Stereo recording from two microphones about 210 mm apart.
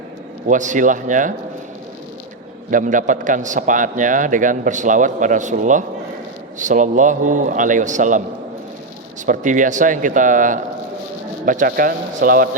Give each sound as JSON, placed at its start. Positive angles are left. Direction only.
{"t": 0.4, "sound": "a man's voice", "side_deg": -35}
{"t": 2.6, "sound": "a man's voice", "side_deg": -40}
{"t": 9.2, "sound": "a man's voice", "side_deg": -35}